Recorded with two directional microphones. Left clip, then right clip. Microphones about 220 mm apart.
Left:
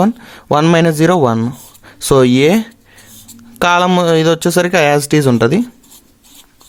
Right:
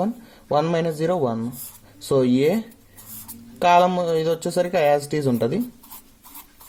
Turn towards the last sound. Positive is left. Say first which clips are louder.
# left 10 dB
turn(degrees=45)  # may be behind; listen again after turning